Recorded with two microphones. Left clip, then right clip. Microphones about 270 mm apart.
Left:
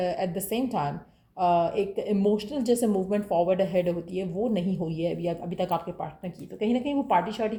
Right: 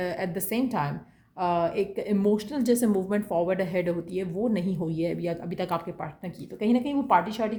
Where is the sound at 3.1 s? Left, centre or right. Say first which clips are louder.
Left 2 dB; right.